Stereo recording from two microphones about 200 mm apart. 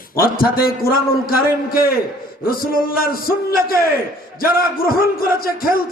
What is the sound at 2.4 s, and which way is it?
A man's voice, 45° left (ahead or behind).